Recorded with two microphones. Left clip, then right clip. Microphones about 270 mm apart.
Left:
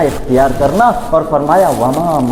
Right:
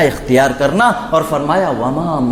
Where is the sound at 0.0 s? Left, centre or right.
Right.